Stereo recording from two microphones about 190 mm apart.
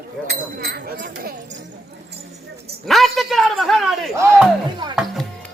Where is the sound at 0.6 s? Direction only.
50° right (ahead or behind).